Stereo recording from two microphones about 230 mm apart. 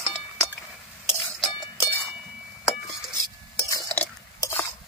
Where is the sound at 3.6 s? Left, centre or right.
Centre.